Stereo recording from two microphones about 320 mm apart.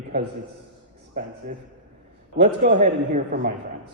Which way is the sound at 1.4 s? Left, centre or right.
Right.